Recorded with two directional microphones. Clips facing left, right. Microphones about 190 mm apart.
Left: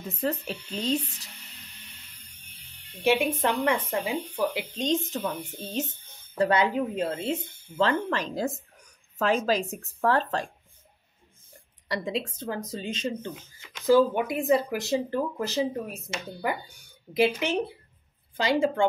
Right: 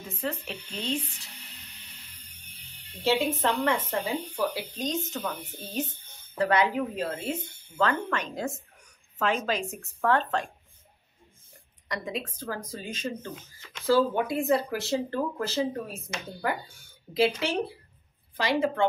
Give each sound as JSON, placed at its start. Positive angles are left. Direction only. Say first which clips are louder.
{"t": 0.1, "sound": "a woman's voice", "louder": "left 4 dB", "side_deg": 40}
{"t": 3.4, "sound": "speech", "louder": "left 2 dB", "side_deg": 15}
{"t": 6.3, "sound": "a woman's voice", "louder": "left 1 dB", "side_deg": 25}
{"t": 11.9, "sound": "speech", "louder": "left 4 dB", "side_deg": 30}